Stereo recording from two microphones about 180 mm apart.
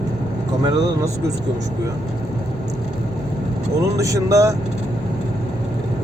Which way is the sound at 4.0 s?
15° right (ahead or behind).